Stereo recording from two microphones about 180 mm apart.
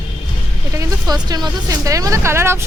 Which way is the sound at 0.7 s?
20° right (ahead or behind).